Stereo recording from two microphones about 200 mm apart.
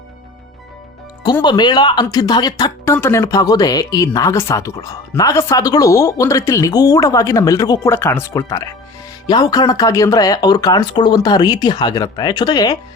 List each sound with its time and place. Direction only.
1.2 s speech: 20° left (ahead or behind)